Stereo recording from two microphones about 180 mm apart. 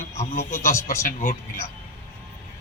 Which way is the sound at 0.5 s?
15° left (ahead or behind).